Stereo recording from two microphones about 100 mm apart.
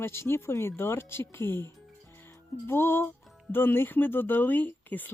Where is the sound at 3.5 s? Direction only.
20° left (ahead or behind).